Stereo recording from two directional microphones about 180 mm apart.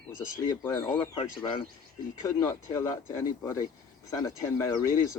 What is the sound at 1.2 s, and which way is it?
Speech, 30° left (ahead or behind).